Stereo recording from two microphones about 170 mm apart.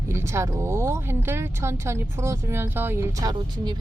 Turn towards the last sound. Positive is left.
turn(degrees=-20)  # may be behind; listen again after turning